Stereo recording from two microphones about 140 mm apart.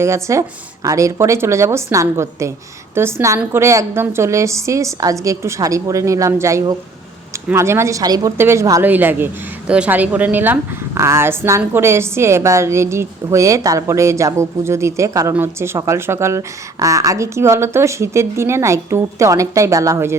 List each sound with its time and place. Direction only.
0.0 s a woman's voice: 20° right (ahead or behind)